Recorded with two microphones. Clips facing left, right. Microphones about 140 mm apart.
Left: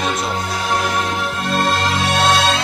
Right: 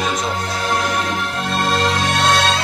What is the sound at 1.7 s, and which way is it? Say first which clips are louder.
Music: even; centre (ahead or behind).